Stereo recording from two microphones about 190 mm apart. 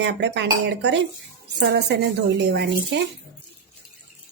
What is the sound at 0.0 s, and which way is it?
Speech, 65° right (ahead or behind).